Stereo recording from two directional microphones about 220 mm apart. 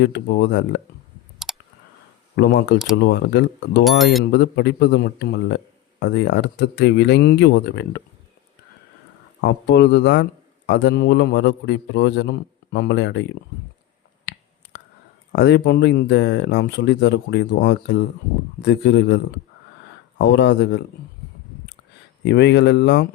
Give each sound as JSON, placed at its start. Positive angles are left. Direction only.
{"t": 0.0, "sound": "a man's voice", "side_deg": 50}
{"t": 1.4, "sound": "clicking", "side_deg": 0}
{"t": 2.3, "sound": "a man's voice", "side_deg": 50}
{"t": 3.8, "sound": "speech", "side_deg": 0}
{"t": 4.3, "sound": "a man's voice", "side_deg": 50}
{"t": 9.4, "sound": "a man's voice", "side_deg": 50}
{"t": 14.3, "sound": "a sound", "side_deg": 45}
{"t": 15.3, "sound": "a man's voice", "side_deg": 50}
{"t": 22.2, "sound": "a man's voice", "side_deg": 55}